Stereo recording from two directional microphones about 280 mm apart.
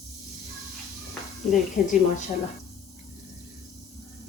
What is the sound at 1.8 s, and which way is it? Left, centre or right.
Speech, left.